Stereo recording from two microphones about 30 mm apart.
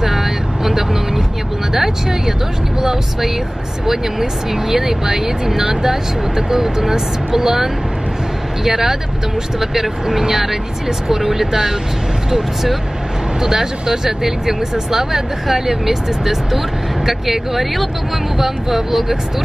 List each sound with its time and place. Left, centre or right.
0.0 s vehicle: centre
1.7 s speech: centre